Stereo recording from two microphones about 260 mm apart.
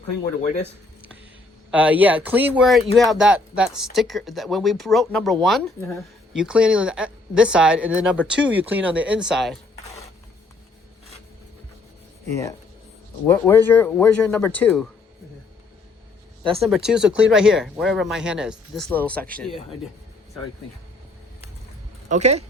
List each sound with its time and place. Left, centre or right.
1.7 s speech: centre
13.2 s speech: centre
16.6 s speech: centre
22.1 s speech: right